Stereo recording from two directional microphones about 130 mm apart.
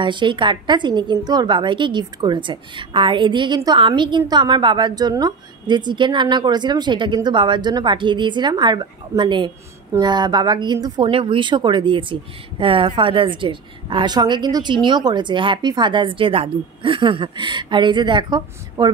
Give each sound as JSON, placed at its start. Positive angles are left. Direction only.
{"t": 0.0, "sound": "speech", "side_deg": -40}